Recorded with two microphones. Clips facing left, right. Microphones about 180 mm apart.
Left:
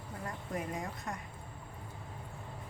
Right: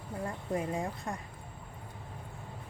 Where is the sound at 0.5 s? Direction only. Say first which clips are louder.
Right 5 dB; 30° right (ahead or behind).